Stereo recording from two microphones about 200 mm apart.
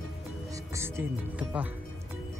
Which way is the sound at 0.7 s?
10° right (ahead or behind).